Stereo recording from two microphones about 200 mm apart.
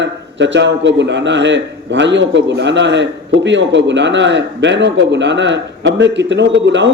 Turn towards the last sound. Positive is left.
turn(degrees=-60)  # may be behind; listen again after turning